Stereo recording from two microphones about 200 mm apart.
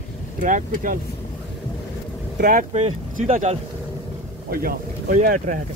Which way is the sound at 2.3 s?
40° right (ahead or behind).